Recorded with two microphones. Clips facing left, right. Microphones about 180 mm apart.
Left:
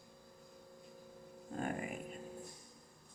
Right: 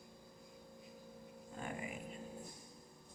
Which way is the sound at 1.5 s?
50° left (ahead or behind).